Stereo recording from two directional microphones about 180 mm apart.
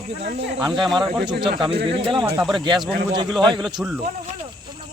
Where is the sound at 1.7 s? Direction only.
65° right (ahead or behind).